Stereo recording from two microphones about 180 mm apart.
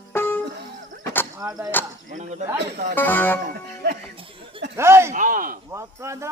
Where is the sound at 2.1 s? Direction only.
40° right (ahead or behind).